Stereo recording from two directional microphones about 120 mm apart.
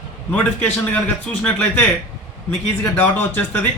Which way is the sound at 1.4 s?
15° left (ahead or behind).